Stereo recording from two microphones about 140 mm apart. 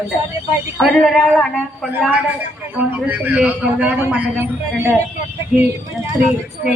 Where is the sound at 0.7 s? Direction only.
Centre (ahead or behind).